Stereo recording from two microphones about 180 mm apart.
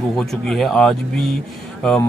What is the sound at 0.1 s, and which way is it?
Speech, centre (ahead or behind).